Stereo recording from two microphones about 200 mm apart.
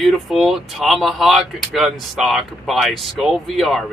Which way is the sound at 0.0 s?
Centre (ahead or behind).